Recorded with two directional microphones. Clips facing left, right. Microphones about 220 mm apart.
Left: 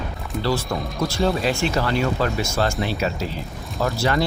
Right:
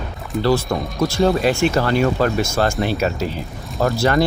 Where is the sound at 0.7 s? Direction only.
55° right (ahead or behind).